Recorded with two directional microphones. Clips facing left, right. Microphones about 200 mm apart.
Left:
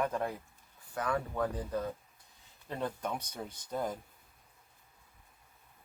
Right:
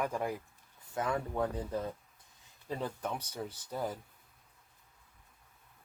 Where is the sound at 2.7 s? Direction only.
10° right (ahead or behind).